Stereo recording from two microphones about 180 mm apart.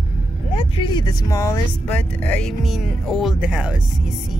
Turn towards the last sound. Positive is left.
turn(degrees=-5)  # may be behind; listen again after turning